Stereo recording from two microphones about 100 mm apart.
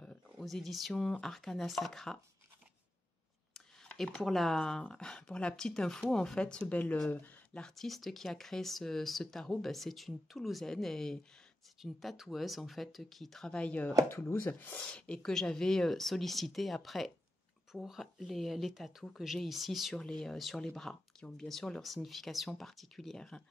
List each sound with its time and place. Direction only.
0.0 s speech: 5° left (ahead or behind)
3.5 s speech: 5° left (ahead or behind)
14.0 s speech: 25° left (ahead or behind); by 23.4 s 5° left (ahead or behind)